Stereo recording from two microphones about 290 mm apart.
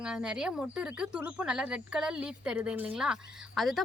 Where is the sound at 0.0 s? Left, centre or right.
Centre.